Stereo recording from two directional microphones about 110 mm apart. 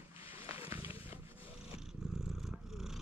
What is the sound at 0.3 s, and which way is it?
Roaring cats, 25° right (ahead or behind).